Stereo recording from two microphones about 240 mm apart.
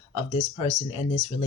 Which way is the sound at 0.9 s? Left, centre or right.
Left.